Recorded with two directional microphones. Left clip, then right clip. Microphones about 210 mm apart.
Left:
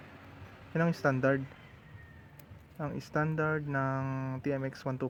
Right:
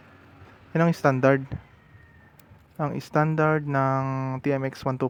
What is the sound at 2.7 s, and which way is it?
Speech, 20° right (ahead or behind).